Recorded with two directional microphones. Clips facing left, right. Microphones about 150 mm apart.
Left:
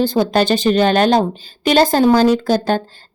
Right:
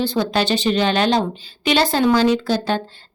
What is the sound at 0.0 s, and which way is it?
Speech, 45° left (ahead or behind).